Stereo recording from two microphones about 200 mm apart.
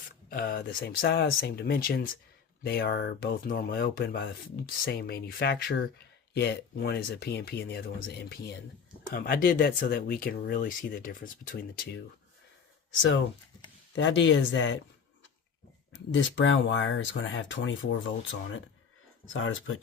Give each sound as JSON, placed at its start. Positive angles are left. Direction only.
{"t": 0.3, "sound": "speech", "side_deg": 50}
{"t": 13.9, "sound": "speech", "side_deg": 65}
{"t": 16.1, "sound": "speech", "side_deg": 70}
{"t": 19.2, "sound": "speech", "side_deg": 80}